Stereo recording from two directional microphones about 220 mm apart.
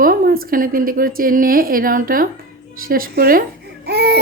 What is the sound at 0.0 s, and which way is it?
Speech, 40° right (ahead or behind).